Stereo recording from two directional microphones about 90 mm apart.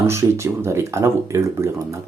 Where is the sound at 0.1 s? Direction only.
35° right (ahead or behind).